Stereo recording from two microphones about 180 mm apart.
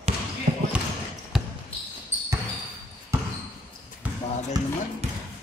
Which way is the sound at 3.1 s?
15° right (ahead or behind).